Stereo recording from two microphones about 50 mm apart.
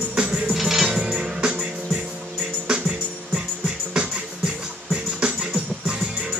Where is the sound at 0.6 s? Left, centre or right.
Centre.